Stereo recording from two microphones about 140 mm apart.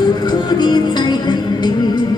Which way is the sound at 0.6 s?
30° left (ahead or behind).